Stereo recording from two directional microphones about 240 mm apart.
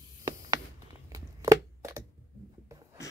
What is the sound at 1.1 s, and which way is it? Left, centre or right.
Chopping, centre.